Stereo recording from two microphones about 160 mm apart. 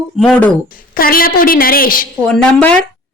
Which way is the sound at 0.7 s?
65° left (ahead or behind).